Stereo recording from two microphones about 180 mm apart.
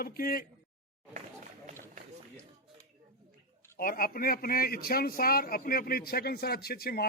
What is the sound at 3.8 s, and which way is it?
A man's voice, 50° left (ahead or behind).